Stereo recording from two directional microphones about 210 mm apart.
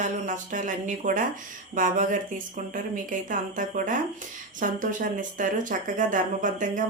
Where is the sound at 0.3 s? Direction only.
35° right (ahead or behind).